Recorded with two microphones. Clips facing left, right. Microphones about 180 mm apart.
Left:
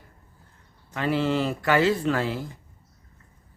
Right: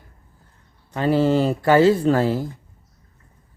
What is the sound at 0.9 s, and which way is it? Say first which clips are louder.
Speech: right 6 dB; 35° right (ahead or behind).